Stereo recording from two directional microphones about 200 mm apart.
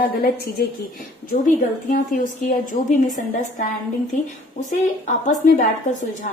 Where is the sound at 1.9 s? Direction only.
40° left (ahead or behind).